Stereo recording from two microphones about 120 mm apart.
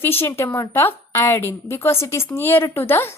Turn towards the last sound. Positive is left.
turn(degrees=20)  # may be behind; listen again after turning